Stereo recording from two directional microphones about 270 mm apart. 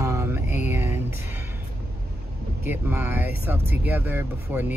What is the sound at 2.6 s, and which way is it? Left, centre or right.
Speech, centre.